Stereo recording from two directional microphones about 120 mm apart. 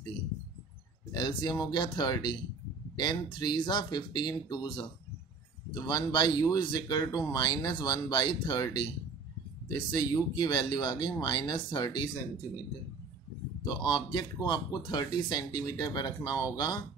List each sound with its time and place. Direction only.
1.1 s speech: 40° left (ahead or behind)
13.7 s speech: 40° left (ahead or behind)